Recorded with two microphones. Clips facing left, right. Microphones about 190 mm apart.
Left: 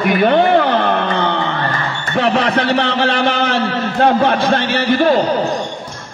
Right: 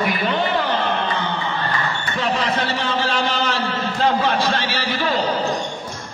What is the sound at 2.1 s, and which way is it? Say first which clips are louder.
A man's voice: left 8 dB; 65° left (ahead or behind).